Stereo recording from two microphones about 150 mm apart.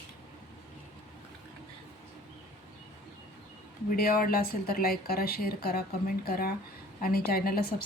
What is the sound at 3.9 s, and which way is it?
Speech, 80° left.